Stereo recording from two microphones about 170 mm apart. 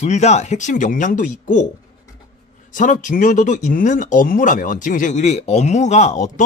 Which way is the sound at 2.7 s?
50° left (ahead or behind).